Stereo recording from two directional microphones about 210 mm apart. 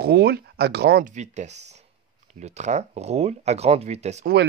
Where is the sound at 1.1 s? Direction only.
35° right (ahead or behind).